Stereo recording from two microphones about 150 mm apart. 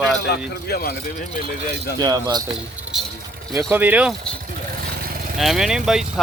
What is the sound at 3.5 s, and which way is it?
Speech, 20° right (ahead or behind).